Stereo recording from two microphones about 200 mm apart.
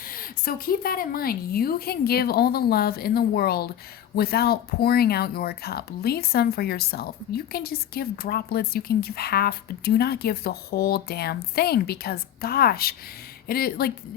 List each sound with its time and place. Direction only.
0.1 s speech: 45° left (ahead or behind)